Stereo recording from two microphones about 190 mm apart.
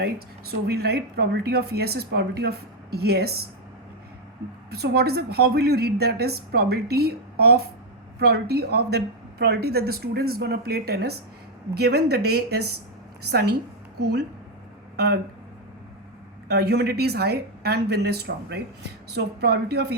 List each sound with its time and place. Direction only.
0.7 s speech: 55° right (ahead or behind)
4.7 s speech: 55° right (ahead or behind)
16.5 s speech: 60° right (ahead or behind)